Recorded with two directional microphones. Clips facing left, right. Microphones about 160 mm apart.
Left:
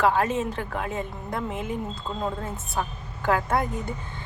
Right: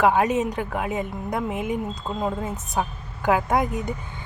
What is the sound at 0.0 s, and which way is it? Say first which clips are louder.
A woman's voice: right 3 dB; 15° right (ahead or behind).